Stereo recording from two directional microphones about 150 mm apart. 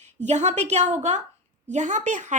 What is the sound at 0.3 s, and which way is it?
A woman's voice, 50° right (ahead or behind).